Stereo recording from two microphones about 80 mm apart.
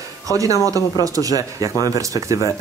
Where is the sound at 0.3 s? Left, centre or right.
Right.